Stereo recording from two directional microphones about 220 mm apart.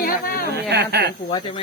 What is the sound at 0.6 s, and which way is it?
Speech, 50° right (ahead or behind).